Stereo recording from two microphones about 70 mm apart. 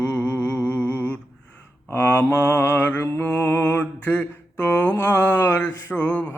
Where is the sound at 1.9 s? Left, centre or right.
Left.